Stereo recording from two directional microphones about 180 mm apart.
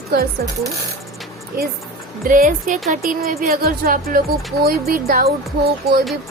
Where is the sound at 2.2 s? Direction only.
50° right (ahead or behind).